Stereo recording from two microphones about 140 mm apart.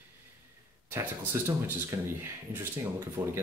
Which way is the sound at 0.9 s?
15° right (ahead or behind).